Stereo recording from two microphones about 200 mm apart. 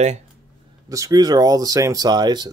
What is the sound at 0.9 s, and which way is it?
Speech, 15° right (ahead or behind).